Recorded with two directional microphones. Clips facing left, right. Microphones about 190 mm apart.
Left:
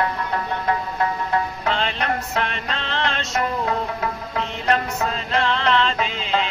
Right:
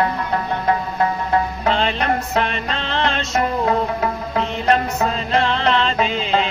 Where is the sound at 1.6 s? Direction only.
25° right (ahead or behind).